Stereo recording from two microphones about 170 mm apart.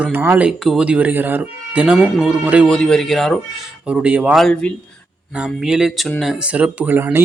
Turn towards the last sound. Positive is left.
turn(degrees=-10)  # may be behind; listen again after turning